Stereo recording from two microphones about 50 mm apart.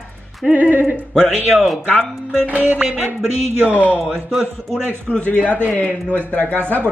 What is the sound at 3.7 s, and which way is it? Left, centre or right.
Speech, left.